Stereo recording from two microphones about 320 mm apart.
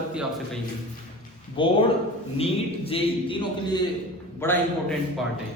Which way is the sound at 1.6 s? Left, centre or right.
Centre.